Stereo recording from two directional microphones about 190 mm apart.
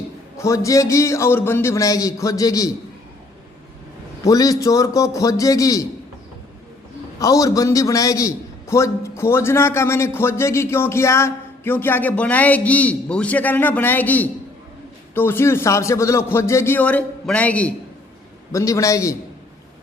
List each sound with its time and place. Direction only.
0.4 s a man's voice: 15° left (ahead or behind)
4.2 s a man's voice: 20° left (ahead or behind)
7.2 s a man's voice: 20° left (ahead or behind)